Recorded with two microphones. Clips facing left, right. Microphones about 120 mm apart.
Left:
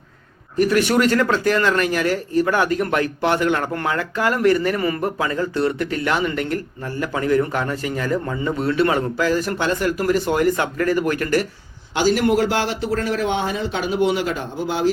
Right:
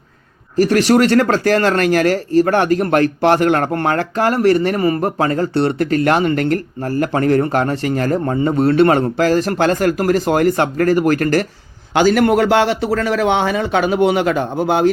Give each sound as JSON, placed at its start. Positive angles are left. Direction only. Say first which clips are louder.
{"t": 0.5, "sound": "a man's voice", "louder": "right 4 dB", "side_deg": -85}
{"t": 1.5, "sound": "a man's voice", "louder": "right 4 dB", "side_deg": -40}
{"t": 1.8, "sound": "speech", "louder": "right 6 dB", "side_deg": -75}
{"t": 2.5, "sound": "a man's voice", "louder": "right 5 dB", "side_deg": -70}
{"t": 4.1, "sound": "a man's voice", "louder": "right 3 dB", "side_deg": -40}
{"t": 5.8, "sound": "speech", "louder": "right 7 dB", "side_deg": -65}
{"t": 7.1, "sound": "a man's voice", "louder": "right 3 dB", "side_deg": -55}
{"t": 8.1, "sound": "a man's voice", "louder": "right 5 dB", "side_deg": -40}
{"t": 9.1, "sound": "speech", "louder": "right 5 dB", "side_deg": -80}
{"t": 10.4, "sound": "speech", "louder": "right 4 dB", "side_deg": -40}
{"t": 10.9, "sound": "a man's voice", "louder": "right 5 dB", "side_deg": -65}